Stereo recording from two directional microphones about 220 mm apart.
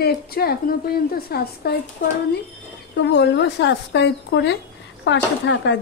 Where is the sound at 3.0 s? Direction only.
55° left (ahead or behind).